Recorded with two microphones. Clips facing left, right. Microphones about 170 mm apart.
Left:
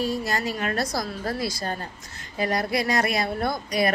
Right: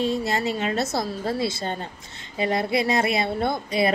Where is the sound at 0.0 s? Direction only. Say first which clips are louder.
Right 2 dB; 25° right (ahead or behind).